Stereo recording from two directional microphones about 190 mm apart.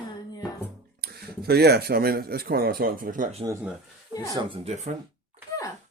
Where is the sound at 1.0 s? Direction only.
55° right (ahead or behind).